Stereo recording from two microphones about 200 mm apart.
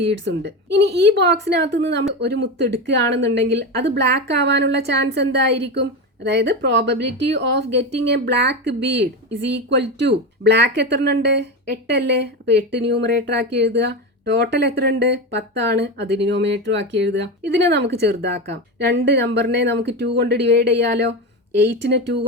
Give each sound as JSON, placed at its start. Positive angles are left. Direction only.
{"t": 0.0, "sound": "a woman's voice", "side_deg": -60}